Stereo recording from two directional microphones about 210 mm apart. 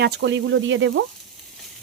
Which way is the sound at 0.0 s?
55° right (ahead or behind).